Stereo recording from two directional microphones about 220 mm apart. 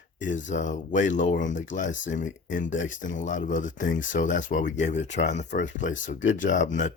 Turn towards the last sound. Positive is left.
turn(degrees=35)  # may be behind; listen again after turning